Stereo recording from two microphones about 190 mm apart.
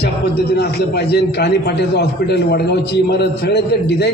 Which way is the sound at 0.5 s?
60° left (ahead or behind).